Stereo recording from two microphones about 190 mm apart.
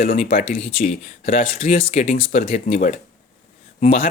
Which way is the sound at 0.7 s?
35° left (ahead or behind).